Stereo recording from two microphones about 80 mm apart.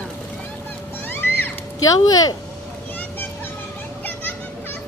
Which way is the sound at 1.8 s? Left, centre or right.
Left.